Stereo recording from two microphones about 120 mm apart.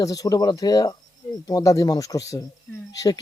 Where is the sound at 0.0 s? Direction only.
30° left (ahead or behind).